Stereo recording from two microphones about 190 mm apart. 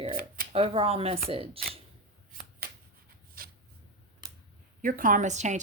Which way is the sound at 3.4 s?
50° right (ahead or behind).